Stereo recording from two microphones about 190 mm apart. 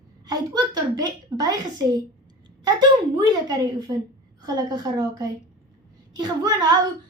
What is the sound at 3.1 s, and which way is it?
Speech, 20° right (ahead or behind).